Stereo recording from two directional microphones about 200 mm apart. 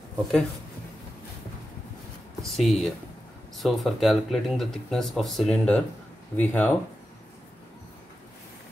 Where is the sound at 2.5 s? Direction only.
Centre (ahead or behind).